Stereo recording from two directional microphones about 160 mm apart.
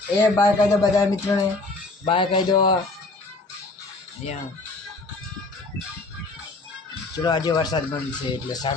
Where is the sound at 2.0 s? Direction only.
35° left (ahead or behind).